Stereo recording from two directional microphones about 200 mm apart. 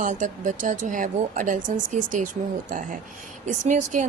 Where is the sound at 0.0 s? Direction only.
40° right (ahead or behind).